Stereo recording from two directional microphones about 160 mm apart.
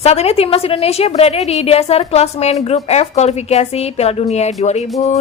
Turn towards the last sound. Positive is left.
turn(degrees=45)  # may be behind; listen again after turning